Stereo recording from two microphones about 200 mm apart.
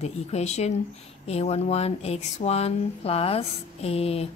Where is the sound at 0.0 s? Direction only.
35° left (ahead or behind).